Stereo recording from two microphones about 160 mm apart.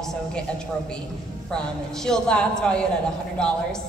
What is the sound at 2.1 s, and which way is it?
Speech, 5° left (ahead or behind).